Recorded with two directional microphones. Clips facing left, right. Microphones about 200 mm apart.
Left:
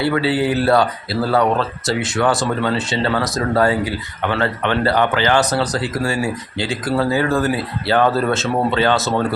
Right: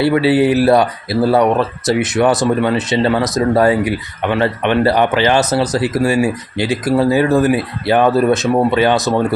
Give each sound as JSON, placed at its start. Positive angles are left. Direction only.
{"t": 0.0, "sound": "speech", "side_deg": -25}